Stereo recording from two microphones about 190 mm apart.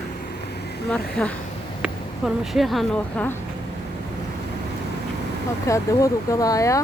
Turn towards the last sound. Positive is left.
turn(degrees=15)  # may be behind; listen again after turning